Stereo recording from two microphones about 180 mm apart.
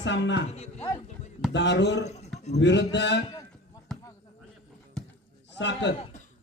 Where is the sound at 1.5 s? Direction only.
80° left.